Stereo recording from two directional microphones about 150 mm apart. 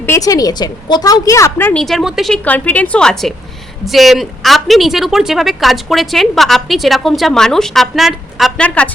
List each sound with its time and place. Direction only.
0.0 s a woman's voice: 20° left (ahead or behind)
1.8 s a woman's voice: centre (ahead or behind)
2.4 s a woman's voice: 10° left (ahead or behind)